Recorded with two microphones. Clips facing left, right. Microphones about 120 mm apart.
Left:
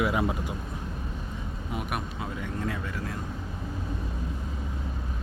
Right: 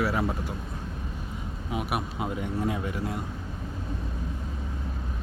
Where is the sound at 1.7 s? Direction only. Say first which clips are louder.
Right 3 dB; 5° right (ahead or behind).